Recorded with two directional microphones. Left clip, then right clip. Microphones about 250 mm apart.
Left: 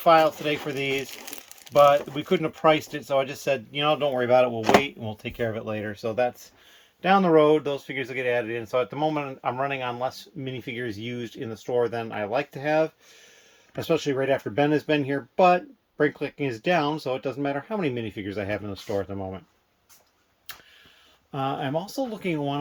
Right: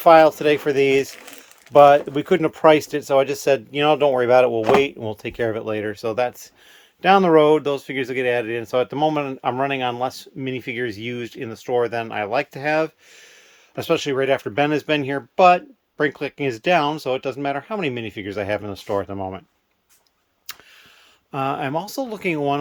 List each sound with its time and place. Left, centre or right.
0.0 s speech: centre
21.3 s speech: centre